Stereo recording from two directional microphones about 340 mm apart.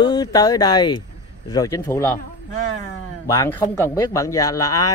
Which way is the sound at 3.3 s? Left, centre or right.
Centre.